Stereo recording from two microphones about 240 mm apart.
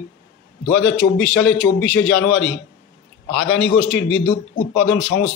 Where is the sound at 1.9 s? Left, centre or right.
Left.